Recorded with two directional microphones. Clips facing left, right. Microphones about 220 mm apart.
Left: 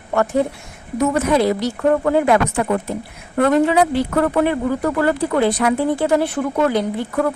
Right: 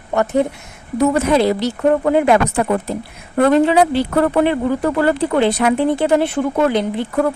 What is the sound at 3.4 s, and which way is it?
Speech, 30° right (ahead or behind).